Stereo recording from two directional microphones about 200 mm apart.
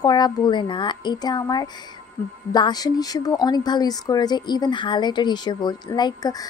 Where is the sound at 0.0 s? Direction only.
20° left (ahead or behind).